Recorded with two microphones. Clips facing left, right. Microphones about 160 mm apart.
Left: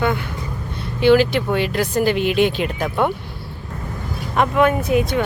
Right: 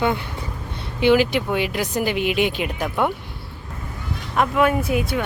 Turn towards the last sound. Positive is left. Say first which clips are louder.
# left 3 dB
turn(degrees=-5)  # may be behind; listen again after turning